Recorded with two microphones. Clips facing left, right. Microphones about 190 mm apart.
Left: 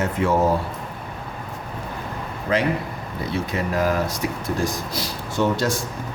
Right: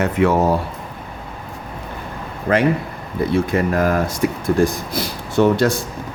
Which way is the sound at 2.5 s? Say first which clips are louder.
Right 5 dB; 55° right (ahead or behind).